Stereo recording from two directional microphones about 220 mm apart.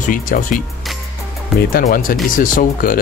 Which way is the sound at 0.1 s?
40° left (ahead or behind).